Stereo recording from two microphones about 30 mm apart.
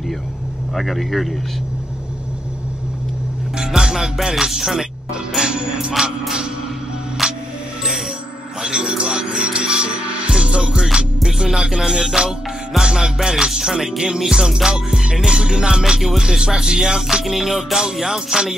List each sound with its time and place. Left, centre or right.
0.7 s a man's voice: centre
3.5 s music: right
5.5 s music: right
7.2 s music: right
8.5 s speech: right
10.3 s music: right
17.2 s music: centre